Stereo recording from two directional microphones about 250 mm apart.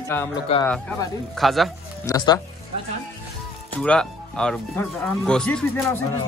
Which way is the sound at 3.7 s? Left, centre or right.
Centre.